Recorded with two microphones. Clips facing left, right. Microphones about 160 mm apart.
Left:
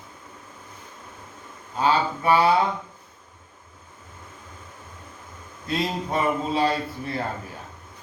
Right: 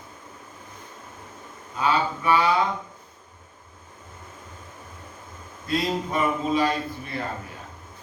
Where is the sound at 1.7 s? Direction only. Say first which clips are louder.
Left 2 dB; 30° left (ahead or behind).